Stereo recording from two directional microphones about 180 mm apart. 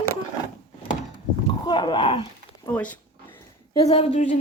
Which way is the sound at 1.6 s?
25° left (ahead or behind).